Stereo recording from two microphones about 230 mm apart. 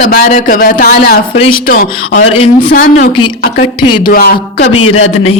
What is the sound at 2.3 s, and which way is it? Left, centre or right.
A man's voice, left.